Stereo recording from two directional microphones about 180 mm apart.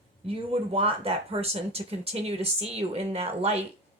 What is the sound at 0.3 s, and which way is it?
Speech, 30° right (ahead or behind).